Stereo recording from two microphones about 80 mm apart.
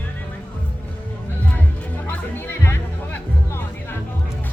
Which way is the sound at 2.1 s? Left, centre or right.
Left.